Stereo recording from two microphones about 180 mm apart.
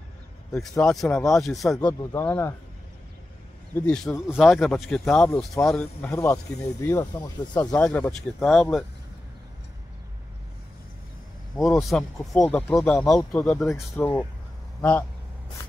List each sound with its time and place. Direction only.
0.5 s speech: centre (ahead or behind)
3.7 s speech: 5° left (ahead or behind)
6.0 s speech: 15° left (ahead or behind)
7.7 s speech: 10° left (ahead or behind)
11.5 s speech: centre (ahead or behind)